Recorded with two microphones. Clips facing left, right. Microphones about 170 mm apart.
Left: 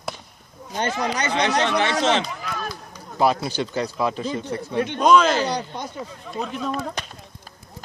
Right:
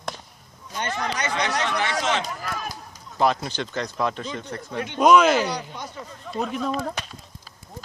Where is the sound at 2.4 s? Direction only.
5° right (ahead or behind).